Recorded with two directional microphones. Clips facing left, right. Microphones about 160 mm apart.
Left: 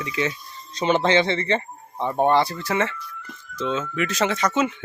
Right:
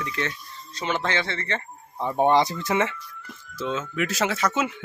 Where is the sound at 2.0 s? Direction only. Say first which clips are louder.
Left 1 dB; centre (ahead or behind).